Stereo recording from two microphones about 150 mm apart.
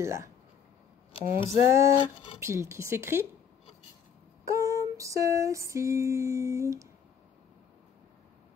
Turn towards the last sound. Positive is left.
turn(degrees=-20)  # may be behind; listen again after turning